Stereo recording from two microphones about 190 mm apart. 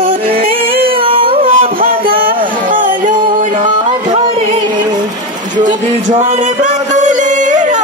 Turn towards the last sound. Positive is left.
turn(degrees=-40)  # may be behind; listen again after turning